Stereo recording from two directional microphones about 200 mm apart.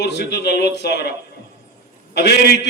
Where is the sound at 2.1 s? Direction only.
55° left (ahead or behind).